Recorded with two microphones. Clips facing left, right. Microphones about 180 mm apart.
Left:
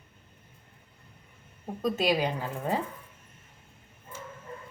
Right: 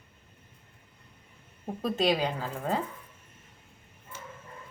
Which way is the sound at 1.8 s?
5° left (ahead or behind).